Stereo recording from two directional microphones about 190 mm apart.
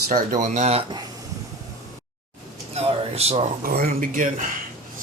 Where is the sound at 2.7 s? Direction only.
30° right (ahead or behind).